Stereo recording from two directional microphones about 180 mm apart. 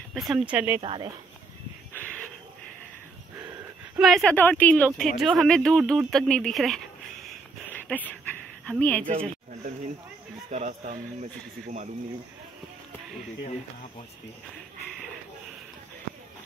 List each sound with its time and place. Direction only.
0.1 s speech: centre (ahead or behind)
0.8 s speech: 25° right (ahead or behind)
4.0 s speech: centre (ahead or behind)
7.6 s a sound: 10° left (ahead or behind)
10.5 s speech: 40° right (ahead or behind)